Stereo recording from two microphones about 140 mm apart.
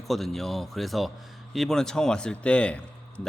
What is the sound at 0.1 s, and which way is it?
A man's voice, centre (ahead or behind).